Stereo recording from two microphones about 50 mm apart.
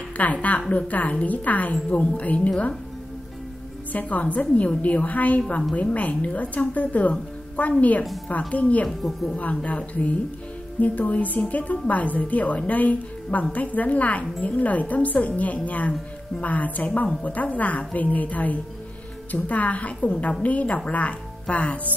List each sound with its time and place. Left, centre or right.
0.2 s a woman's voice: left
3.9 s a woman's voice: left
8.8 s a woman's voice: centre
9.4 s a woman's voice: left